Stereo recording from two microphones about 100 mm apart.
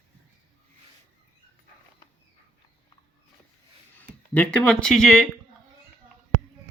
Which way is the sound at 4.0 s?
15° left (ahead or behind).